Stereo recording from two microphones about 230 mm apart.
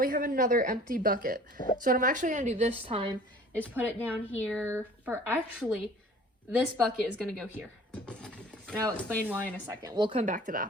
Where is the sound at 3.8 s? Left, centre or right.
Centre.